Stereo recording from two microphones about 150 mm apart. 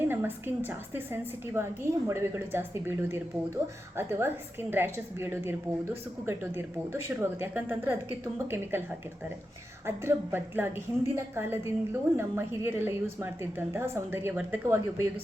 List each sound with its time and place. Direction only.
0.1 s a woman's voice: 15° right (ahead or behind)
9.8 s a woman's voice: 15° right (ahead or behind)